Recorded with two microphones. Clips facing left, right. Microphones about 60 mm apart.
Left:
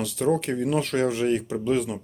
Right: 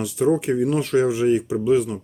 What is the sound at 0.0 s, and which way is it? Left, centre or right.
Speech, centre.